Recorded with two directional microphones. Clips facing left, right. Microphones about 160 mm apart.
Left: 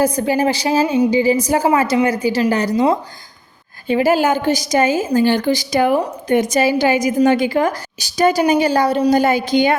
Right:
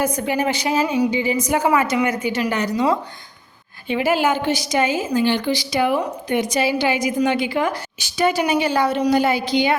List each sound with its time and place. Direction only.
0.0 s a woman's voice: 35° left (ahead or behind)